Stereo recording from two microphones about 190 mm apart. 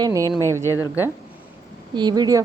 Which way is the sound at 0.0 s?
15° right (ahead or behind).